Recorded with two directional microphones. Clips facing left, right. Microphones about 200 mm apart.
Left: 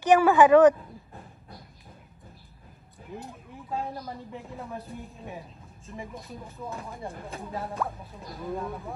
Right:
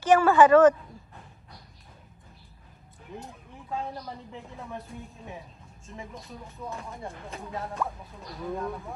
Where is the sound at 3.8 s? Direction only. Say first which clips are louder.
Left 1 dB; centre (ahead or behind).